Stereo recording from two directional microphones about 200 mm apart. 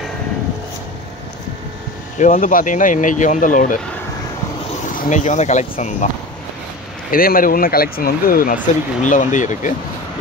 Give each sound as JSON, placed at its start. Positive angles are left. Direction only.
{"t": 2.1, "sound": "speech", "side_deg": 40}
{"t": 4.9, "sound": "speech", "side_deg": 40}
{"t": 7.1, "sound": "speech", "side_deg": 45}